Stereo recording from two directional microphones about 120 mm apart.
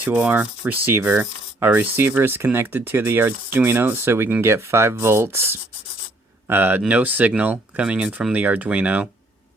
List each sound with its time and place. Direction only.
0.0 s rub: 10° right (ahead or behind)
6.5 s speech: 15° right (ahead or behind)